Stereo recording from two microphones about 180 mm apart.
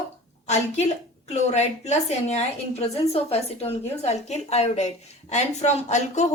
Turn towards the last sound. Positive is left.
turn(degrees=40)  # may be behind; listen again after turning